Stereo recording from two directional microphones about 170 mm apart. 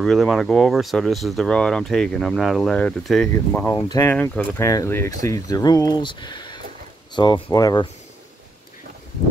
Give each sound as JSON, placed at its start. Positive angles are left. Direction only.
{"t": 0.0, "sound": "speech", "side_deg": 0}